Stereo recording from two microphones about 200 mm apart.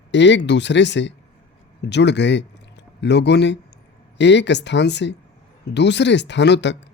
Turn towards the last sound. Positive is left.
turn(degrees=60)  # may be behind; listen again after turning